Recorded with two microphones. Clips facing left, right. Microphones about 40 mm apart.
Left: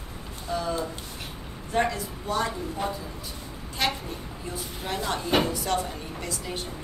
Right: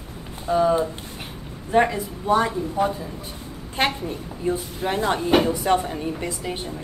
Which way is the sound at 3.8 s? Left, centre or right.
Right.